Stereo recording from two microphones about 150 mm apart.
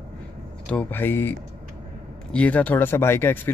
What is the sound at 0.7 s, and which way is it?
Speech, 10° left (ahead or behind).